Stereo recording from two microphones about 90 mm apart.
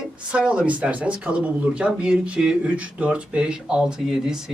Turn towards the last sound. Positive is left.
turn(degrees=-5)  # may be behind; listen again after turning